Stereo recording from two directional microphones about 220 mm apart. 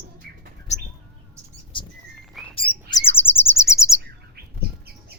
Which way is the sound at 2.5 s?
25° left (ahead or behind).